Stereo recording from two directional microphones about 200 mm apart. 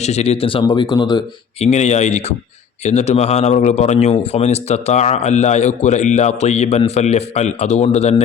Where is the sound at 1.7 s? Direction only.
35° left (ahead or behind).